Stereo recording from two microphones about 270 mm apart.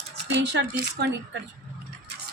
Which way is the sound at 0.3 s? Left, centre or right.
Right.